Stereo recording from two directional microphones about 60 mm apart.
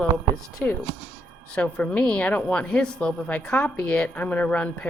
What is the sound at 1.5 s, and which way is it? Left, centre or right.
Speech, left.